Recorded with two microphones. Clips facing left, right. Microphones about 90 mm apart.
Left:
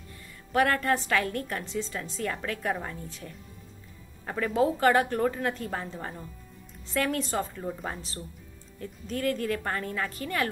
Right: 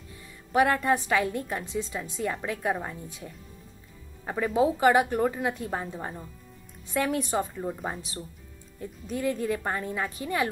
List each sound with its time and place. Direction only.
0.5 s a woman's voice: 15° right (ahead or behind)
4.2 s music: 15° right (ahead or behind)
4.6 s a woman's voice: 15° right (ahead or behind)